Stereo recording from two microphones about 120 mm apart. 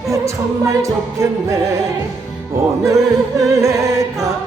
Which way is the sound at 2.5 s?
25° right (ahead or behind).